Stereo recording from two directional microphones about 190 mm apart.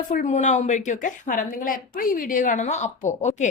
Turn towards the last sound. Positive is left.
turn(degrees=40)  # may be behind; listen again after turning